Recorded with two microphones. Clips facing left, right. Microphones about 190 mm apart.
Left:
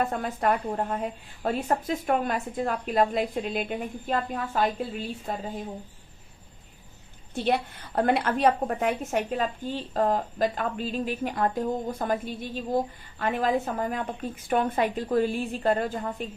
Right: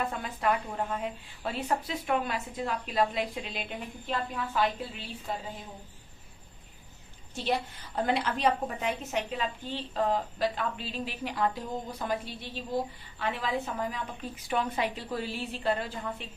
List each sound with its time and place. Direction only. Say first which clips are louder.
0.0 s a woman's voice: left 4 dB; 45° left (ahead or behind)
7.3 s a woman's voice: left 5 dB; 60° left (ahead or behind)